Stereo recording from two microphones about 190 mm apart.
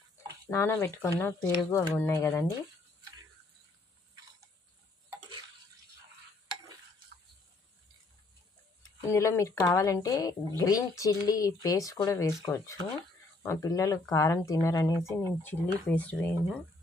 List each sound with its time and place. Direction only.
0.5 s speech: 15° left (ahead or behind)
9.0 s speech: 15° left (ahead or behind)